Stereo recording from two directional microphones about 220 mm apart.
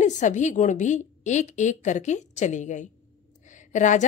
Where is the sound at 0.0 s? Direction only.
35° left (ahead or behind).